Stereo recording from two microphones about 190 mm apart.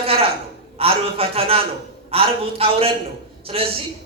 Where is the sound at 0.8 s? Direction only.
30° right (ahead or behind).